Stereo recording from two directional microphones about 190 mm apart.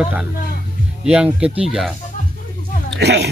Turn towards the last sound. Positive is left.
turn(degrees=-60)  # may be behind; listen again after turning